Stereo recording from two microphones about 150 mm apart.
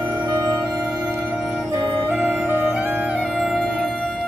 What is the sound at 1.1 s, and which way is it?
Music, 15° right (ahead or behind).